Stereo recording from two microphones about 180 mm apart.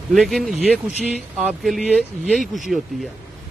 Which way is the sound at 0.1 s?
Centre (ahead or behind).